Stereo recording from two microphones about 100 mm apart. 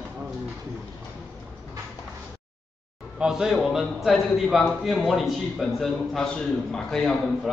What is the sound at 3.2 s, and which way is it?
A man's voice, 5° right (ahead or behind).